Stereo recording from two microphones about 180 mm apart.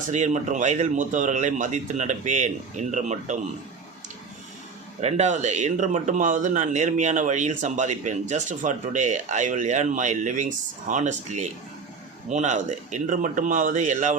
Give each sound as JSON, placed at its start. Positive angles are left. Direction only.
{"t": 0.1, "sound": "speech", "side_deg": -40}
{"t": 4.9, "sound": "speech", "side_deg": -40}